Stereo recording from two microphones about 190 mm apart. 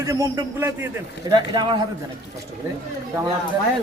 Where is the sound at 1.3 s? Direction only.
25° right (ahead or behind).